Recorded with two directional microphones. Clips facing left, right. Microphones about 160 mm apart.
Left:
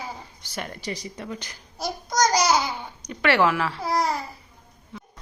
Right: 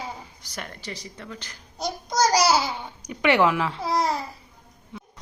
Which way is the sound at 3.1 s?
15° right (ahead or behind).